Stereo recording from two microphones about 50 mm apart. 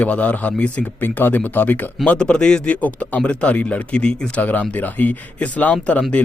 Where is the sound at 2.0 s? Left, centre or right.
Centre.